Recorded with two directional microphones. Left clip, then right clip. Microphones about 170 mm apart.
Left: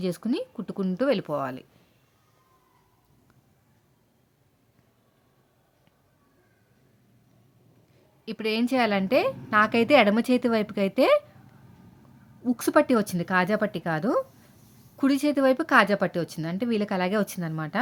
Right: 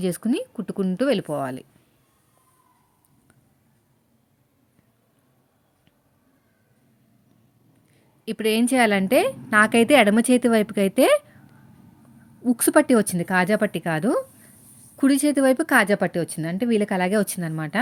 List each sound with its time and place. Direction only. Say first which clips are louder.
0.0 s a woman's voice: right 4 dB; 15° right (ahead or behind)
8.2 s a woman's voice: right 5 dB; 15° right (ahead or behind)
12.4 s a woman's voice: right 3 dB; 15° right (ahead or behind)